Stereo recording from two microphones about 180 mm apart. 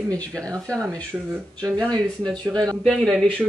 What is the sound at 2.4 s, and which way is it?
Speech, 20° right (ahead or behind).